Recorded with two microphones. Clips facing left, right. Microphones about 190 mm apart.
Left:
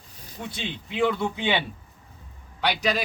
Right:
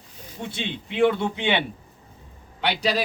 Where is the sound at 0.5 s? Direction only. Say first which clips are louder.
Right 3 dB; 25° right (ahead or behind).